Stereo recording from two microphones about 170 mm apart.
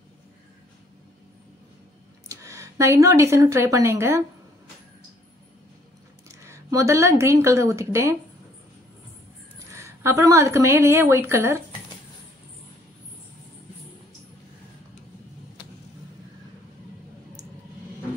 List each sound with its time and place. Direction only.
2.2 s speech: 20° right (ahead or behind)
6.2 s speech: 15° right (ahead or behind)
9.6 s a woman's voice: 15° right (ahead or behind)